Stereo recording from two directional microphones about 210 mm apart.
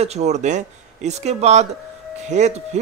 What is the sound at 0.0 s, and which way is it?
Speech, 30° right (ahead or behind).